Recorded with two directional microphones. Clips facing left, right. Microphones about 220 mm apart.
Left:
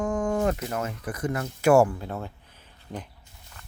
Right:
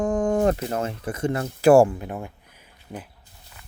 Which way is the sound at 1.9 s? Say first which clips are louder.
Right 2 dB; 15° right (ahead or behind).